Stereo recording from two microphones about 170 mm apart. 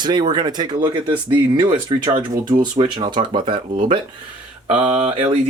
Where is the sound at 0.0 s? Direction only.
25° right (ahead or behind).